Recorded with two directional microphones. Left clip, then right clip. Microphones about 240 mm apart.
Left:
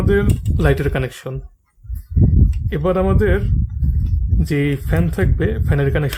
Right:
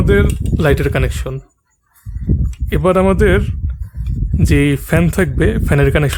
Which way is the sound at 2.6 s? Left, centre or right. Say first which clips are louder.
Right 6 dB; right.